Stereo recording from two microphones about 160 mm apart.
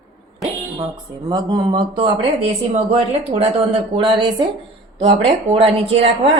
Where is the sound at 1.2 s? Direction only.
25° right (ahead or behind).